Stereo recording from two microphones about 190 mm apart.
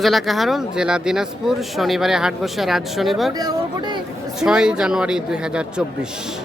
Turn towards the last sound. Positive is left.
turn(degrees=-5)  # may be behind; listen again after turning